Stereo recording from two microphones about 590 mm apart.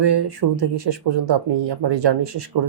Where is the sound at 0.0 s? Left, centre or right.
Right.